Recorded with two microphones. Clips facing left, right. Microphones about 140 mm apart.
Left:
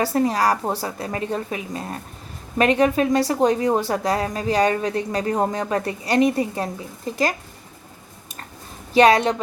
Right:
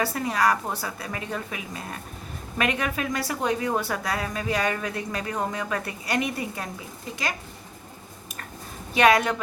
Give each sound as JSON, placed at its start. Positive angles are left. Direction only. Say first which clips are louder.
{"t": 0.0, "sound": "speech", "louder": "left 5 dB", "side_deg": 35}
{"t": 8.9, "sound": "a woman's voice", "louder": "left 5 dB", "side_deg": 35}